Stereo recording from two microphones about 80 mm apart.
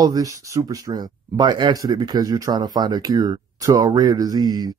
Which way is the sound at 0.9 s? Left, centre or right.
Right.